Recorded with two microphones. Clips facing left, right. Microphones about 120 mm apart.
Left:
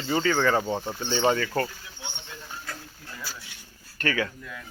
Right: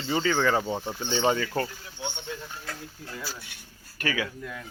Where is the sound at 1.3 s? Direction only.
15° right (ahead or behind).